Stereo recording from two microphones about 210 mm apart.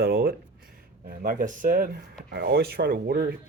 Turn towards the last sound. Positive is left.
turn(degrees=-45)  # may be behind; listen again after turning